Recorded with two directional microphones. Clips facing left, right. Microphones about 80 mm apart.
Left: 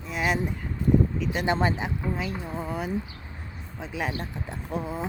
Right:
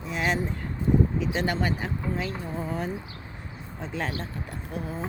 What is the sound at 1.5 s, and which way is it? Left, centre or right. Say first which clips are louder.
Speech: left 3 dB; left.